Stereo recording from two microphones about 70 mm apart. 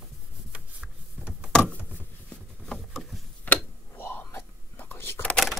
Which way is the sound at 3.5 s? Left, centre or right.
Left.